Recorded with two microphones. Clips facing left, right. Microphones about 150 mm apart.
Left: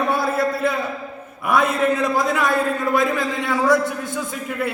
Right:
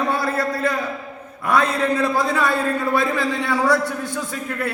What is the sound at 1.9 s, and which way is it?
A man's voice, 15° left (ahead or behind).